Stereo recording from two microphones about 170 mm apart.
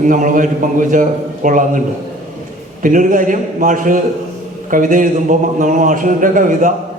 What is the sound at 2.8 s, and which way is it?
A man's voice, 50° right (ahead or behind).